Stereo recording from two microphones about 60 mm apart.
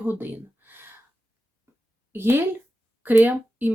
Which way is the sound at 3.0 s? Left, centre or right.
Right.